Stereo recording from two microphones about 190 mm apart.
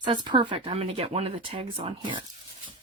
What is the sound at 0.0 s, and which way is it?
Speech, 25° right (ahead or behind).